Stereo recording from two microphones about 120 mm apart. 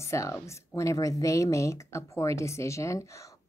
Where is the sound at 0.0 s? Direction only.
25° left (ahead or behind).